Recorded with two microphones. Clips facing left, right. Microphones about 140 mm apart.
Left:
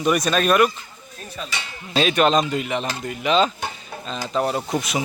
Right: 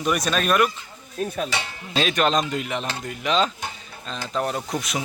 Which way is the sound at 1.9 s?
Centre (ahead or behind).